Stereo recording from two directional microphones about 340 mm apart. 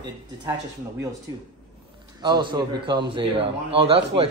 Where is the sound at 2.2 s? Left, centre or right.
Centre.